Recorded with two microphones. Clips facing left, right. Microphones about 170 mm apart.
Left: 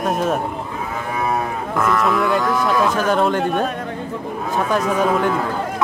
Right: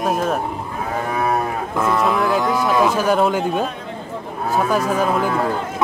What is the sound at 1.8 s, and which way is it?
Speech, 20° right (ahead or behind).